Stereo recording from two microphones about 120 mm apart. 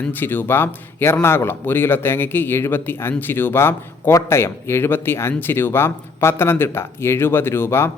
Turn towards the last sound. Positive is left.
turn(degrees=20)  # may be behind; listen again after turning